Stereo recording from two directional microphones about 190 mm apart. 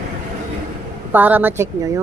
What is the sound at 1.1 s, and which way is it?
Speech, 10° right (ahead or behind).